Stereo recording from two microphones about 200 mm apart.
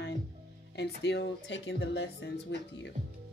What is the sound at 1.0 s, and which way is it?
Speech, 60° left (ahead or behind).